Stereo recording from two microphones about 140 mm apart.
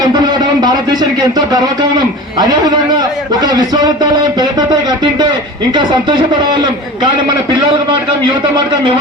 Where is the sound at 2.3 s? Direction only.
30° right (ahead or behind).